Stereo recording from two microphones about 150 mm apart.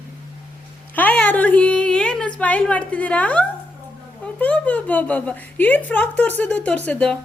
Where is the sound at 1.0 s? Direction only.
10° left (ahead or behind).